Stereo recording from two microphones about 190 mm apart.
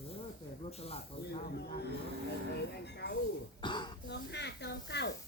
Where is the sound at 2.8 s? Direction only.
60° left (ahead or behind).